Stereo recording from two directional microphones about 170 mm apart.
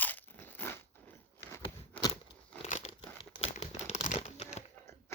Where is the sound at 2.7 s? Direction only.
45° left (ahead or behind).